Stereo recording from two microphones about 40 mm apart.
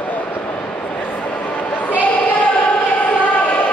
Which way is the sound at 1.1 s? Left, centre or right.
Left.